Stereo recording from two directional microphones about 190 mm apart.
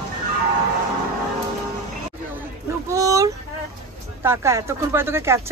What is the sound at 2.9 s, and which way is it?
Vehicle, 15° right (ahead or behind).